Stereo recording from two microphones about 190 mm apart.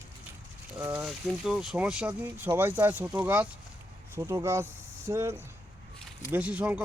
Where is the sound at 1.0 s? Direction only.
Centre (ahead or behind).